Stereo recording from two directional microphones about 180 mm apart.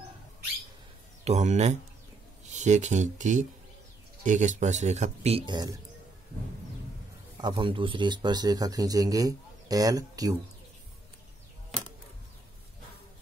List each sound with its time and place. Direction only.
1.2 s speech: 40° right (ahead or behind); by 5.8 s 25° right (ahead or behind)
7.4 s speech: 25° right (ahead or behind)